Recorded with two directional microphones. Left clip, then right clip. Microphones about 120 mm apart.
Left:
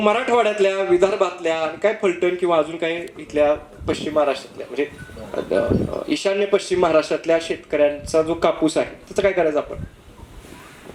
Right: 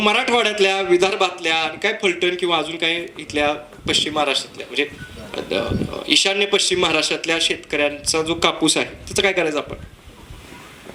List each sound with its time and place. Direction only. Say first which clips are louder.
0.0 s speech: even; 40° right (ahead or behind)